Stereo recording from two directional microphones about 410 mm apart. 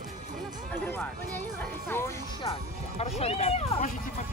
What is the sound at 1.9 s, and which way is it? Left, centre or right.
Speech, centre.